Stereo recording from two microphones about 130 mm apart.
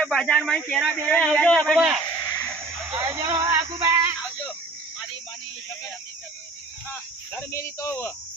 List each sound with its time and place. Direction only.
0.0 s a man's voice: 5° left (ahead or behind)
2.1 s a sound: 30° left (ahead or behind)
3.0 s speech: 20° right (ahead or behind)
3.3 s music: 30° right (ahead or behind)
6.9 s speech: 20° left (ahead or behind)